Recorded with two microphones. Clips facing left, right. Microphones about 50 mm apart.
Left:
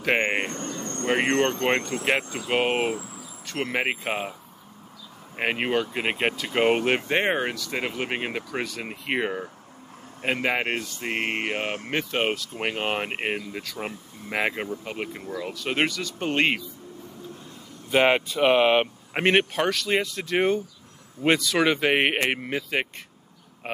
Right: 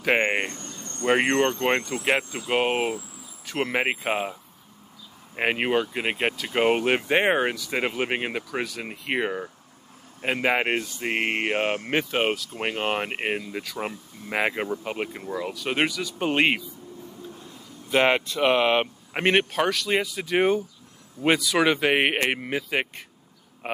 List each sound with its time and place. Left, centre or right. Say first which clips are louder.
0.0 s a sound: right 1 dB; centre
0.6 s cricket: left 8 dB; left
1.0 s speech: right 2 dB; centre
2.3 s speech: even; centre
3.4 s speech: right 2 dB; centre
5.9 s speech: even; centre
17.8 s a man's voice: left 1 dB; centre